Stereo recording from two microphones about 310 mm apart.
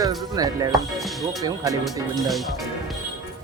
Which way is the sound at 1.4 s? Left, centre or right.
Centre.